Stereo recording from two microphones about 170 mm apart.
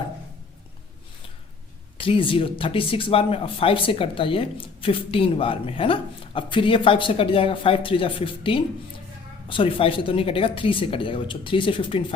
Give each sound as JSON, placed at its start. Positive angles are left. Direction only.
{"t": 2.0, "sound": "speech", "side_deg": 30}